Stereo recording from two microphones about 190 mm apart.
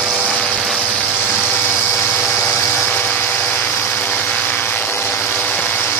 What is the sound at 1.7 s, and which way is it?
Vehicle, 5° left (ahead or behind).